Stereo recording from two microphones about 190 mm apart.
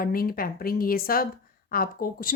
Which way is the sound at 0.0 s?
50° left (ahead or behind).